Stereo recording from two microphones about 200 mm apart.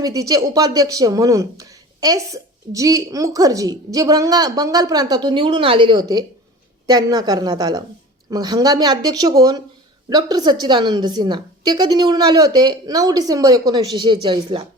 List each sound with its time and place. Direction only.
0.0 s a woman's voice: 20° right (ahead or behind)